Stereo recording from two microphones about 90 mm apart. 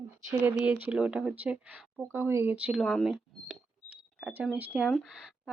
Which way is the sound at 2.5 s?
15° right (ahead or behind).